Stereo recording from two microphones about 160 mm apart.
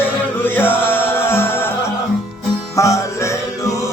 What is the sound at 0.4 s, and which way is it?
Music, 15° left (ahead or behind).